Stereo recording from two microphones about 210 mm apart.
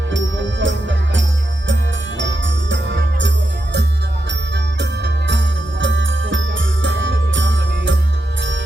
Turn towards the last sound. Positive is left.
turn(degrees=-60)  # may be behind; listen again after turning